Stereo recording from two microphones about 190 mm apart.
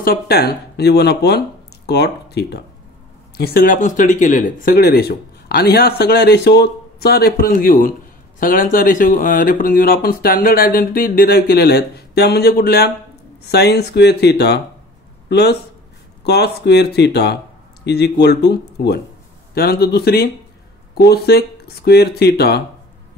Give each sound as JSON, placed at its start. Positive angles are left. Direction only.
{"t": 0.0, "sound": "speech", "side_deg": 55}